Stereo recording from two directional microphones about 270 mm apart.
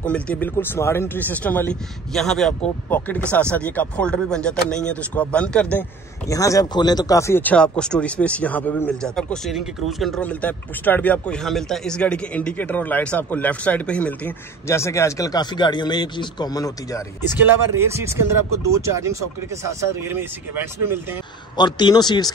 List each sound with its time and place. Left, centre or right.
0.0 s speech: centre
17.7 s speech: centre
21.5 s speech: centre